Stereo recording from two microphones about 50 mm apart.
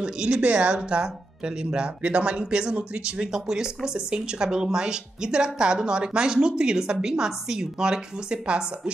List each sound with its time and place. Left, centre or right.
0.0 s speech: right
3.3 s speech: centre